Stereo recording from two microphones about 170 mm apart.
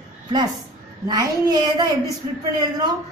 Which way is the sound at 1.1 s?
25° right (ahead or behind).